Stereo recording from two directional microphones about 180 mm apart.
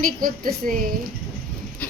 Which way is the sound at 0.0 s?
50° right (ahead or behind).